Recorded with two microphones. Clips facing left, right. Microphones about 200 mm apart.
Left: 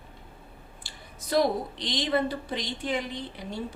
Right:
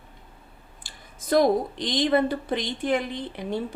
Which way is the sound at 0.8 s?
50° right (ahead or behind).